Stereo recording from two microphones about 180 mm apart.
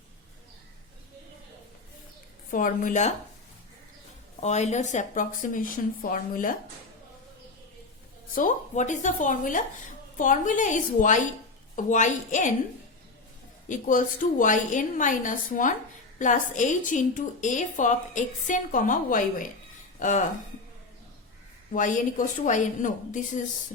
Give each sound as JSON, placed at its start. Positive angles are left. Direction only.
{"t": 2.5, "sound": "a woman's voice", "side_deg": 50}
{"t": 4.4, "sound": "a woman's voice", "side_deg": 40}
{"t": 8.4, "sound": "a woman's voice", "side_deg": 40}
{"t": 13.7, "sound": "a woman's voice", "side_deg": 45}
{"t": 21.7, "sound": "a woman's voice", "side_deg": 45}